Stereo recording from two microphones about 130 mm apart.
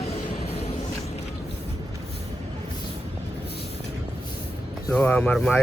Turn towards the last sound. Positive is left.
turn(degrees=5)  # may be behind; listen again after turning